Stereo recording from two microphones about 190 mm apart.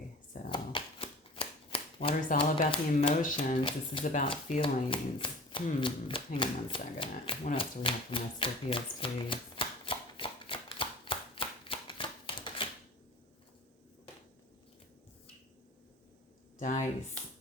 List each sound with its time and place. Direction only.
0.4 s shuffling cards: 25° left (ahead or behind)
2.6 s speech: 30° left (ahead or behind)
3.2 s speech: 45° left (ahead or behind)
3.6 s speech: 25° left (ahead or behind)
4.0 s speech: 45° left (ahead or behind)
4.3 s speech: 30° left (ahead or behind)
7.5 s typewriter: 30° left (ahead or behind)
16.6 s speech: 40° left (ahead or behind)